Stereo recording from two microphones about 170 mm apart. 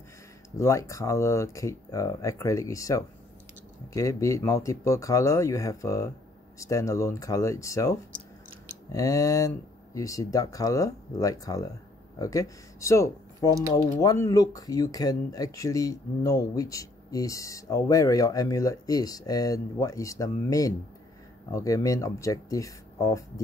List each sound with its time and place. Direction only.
0.6 s speech: 15° left (ahead or behind)